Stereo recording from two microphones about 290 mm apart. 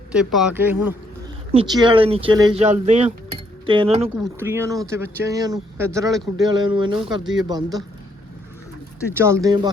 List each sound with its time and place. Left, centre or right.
0.1 s speech: centre
4.1 s speech: centre
9.1 s speech: centre